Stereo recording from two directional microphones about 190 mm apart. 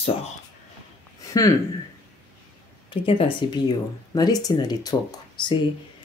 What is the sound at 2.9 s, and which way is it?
Speech, 30° left (ahead or behind).